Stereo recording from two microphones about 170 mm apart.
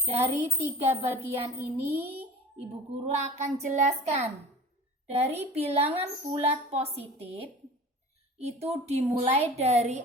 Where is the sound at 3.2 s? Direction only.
40° right (ahead or behind).